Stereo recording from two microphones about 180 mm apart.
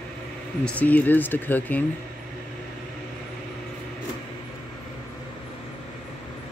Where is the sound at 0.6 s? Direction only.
10° left (ahead or behind).